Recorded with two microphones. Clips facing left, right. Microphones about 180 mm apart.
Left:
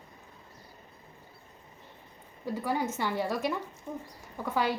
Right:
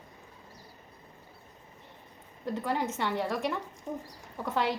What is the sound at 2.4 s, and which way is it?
A woman's voice, centre (ahead or behind).